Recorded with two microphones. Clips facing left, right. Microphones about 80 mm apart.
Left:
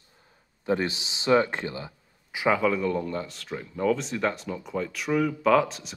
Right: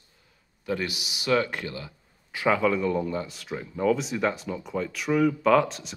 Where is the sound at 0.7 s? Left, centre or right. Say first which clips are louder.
Left 3 dB; left.